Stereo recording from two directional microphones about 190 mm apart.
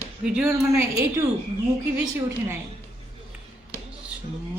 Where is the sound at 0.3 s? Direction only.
5° right (ahead or behind).